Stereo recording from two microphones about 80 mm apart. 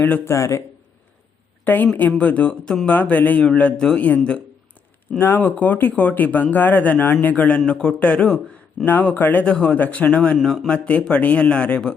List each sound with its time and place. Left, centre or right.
0.3 s speech: left
1.6 s a woman's voice: left
5.1 s speech: left
10.3 s speech: centre
10.7 s speech: centre